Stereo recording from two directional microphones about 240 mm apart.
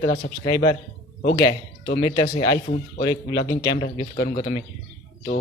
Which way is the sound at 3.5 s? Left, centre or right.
Centre.